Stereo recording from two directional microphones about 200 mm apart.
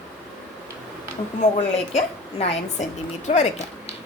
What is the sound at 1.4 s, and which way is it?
A woman's voice, 35° left (ahead or behind).